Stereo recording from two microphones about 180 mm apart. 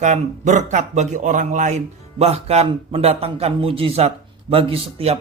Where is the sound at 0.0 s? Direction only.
40° right (ahead or behind).